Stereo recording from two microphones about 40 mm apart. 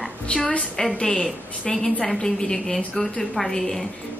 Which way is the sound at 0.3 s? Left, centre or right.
Left.